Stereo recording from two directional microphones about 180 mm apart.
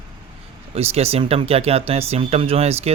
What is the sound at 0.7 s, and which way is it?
Speech, 35° right (ahead or behind).